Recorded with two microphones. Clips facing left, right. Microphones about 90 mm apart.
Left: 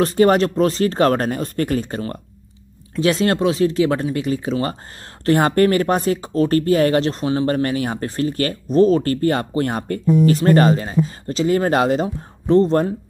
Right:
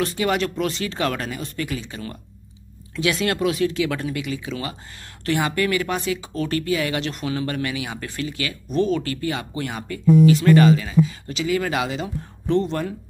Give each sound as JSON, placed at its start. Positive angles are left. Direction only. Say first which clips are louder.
{"t": 0.0, "sound": "speech", "louder": "left 8 dB", "side_deg": 40}